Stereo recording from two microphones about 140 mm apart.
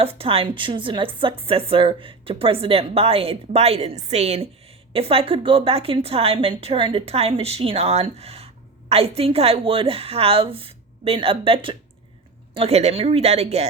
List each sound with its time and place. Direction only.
0.0 s a woman's voice: 45° right (ahead or behind)
12.5 s a woman's voice: 50° right (ahead or behind)